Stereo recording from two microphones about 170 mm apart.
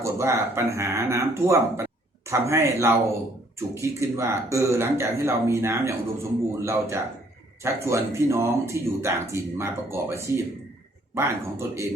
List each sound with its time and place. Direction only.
0.0 s speech: 15° right (ahead or behind)